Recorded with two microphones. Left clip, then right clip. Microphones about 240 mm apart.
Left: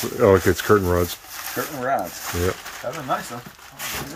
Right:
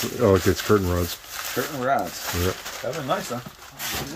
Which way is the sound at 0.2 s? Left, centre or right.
Centre.